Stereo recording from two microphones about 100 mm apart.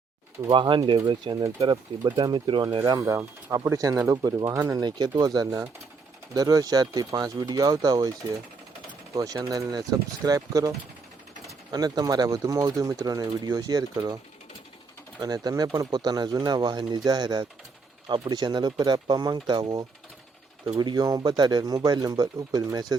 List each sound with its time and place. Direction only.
0.5 s speech: 55° right (ahead or behind)
3.0 s speech: 30° right (ahead or behind)
9.1 s speech: 35° right (ahead or behind)
15.2 s speech: 40° right (ahead or behind)